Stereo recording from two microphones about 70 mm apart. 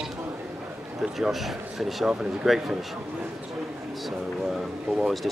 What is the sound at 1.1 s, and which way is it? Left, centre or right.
Speech, centre.